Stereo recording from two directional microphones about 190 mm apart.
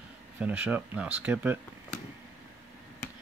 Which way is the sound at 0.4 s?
10° right (ahead or behind).